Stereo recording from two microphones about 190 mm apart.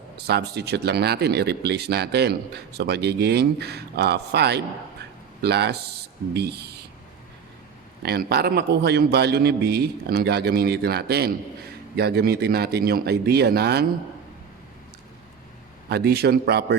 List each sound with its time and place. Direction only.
0.3 s speech: 60° right (ahead or behind)
8.0 s speech: 55° right (ahead or behind)
15.9 s speech: 55° right (ahead or behind)